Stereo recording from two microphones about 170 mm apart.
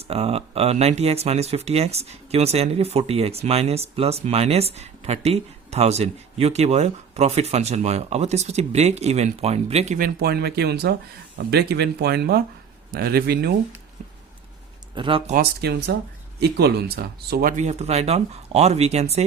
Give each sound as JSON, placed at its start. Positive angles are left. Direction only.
{"t": 0.0, "sound": "speech", "side_deg": -35}
{"t": 10.0, "sound": "speech", "side_deg": -70}
{"t": 14.9, "sound": "speech", "side_deg": -30}
{"t": 15.4, "sound": "speech", "side_deg": -70}
{"t": 17.6, "sound": "speech", "side_deg": -40}